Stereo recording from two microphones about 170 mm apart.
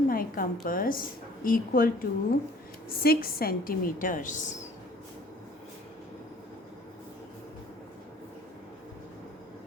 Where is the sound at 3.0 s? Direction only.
60° left (ahead or behind).